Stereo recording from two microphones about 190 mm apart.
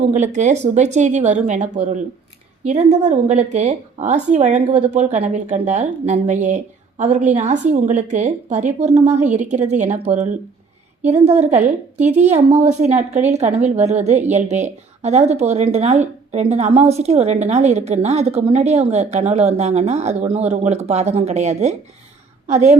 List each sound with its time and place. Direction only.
0.1 s speech: 40° right (ahead or behind)
11.5 s speech: 35° right (ahead or behind)